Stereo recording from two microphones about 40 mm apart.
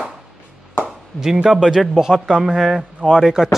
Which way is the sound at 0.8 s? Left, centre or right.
Centre.